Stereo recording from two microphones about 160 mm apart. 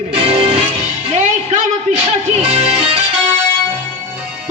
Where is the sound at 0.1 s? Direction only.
40° right (ahead or behind).